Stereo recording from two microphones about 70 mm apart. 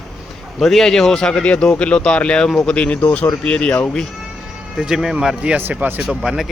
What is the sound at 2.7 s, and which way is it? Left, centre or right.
Speech, centre.